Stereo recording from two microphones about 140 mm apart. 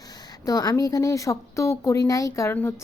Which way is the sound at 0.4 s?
25° left (ahead or behind).